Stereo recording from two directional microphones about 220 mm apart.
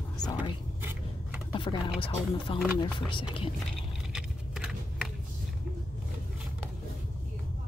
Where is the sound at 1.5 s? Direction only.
20° left (ahead or behind).